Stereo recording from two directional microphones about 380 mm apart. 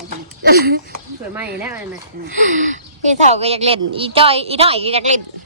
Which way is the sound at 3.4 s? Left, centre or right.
Centre.